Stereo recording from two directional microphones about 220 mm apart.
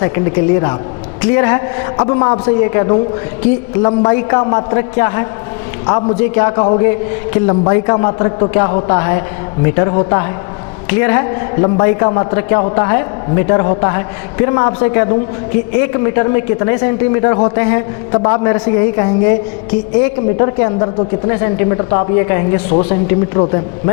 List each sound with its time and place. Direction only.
0.0 s a man's voice: 15° left (ahead or behind)